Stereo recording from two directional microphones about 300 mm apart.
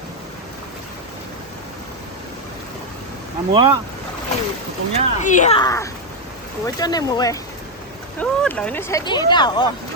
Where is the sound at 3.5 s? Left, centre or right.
Centre.